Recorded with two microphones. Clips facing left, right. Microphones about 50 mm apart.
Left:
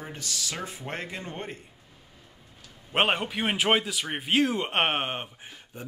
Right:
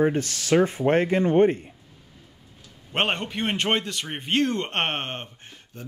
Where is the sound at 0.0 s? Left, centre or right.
Right.